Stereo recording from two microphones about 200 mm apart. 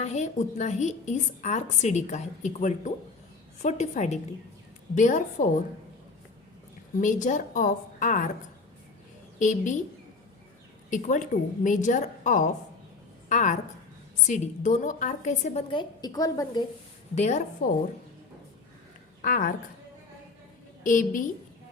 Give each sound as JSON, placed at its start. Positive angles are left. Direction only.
{"t": 0.0, "sound": "a woman's voice", "side_deg": 35}
{"t": 7.0, "sound": "a woman's voice", "side_deg": 40}
{"t": 9.4, "sound": "a woman's voice", "side_deg": 40}
{"t": 10.8, "sound": "a woman's voice", "side_deg": 40}
{"t": 17.2, "sound": "a woman's voice", "side_deg": 35}
{"t": 19.2, "sound": "a woman's voice", "side_deg": 45}
{"t": 20.8, "sound": "a woman's voice", "side_deg": 40}